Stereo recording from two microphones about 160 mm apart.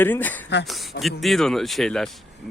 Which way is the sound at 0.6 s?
Centre (ahead or behind).